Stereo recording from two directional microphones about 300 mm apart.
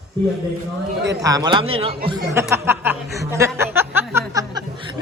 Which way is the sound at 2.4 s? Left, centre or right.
Centre.